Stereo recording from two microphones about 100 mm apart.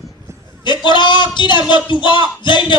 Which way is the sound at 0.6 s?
50° left (ahead or behind).